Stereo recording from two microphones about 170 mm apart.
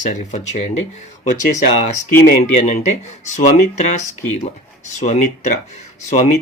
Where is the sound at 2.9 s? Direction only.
45° left (ahead or behind).